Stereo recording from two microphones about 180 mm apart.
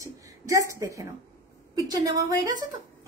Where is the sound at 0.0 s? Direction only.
15° right (ahead or behind).